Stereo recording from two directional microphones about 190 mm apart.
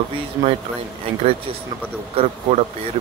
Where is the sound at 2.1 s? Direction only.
30° right (ahead or behind).